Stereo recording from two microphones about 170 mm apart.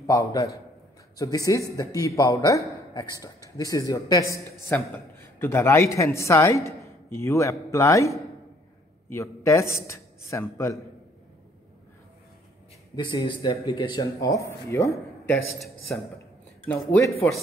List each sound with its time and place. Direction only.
0.0 s a man's voice: 20° left (ahead or behind)
12.9 s a man's voice: 25° left (ahead or behind); by 17.4 s 10° left (ahead or behind)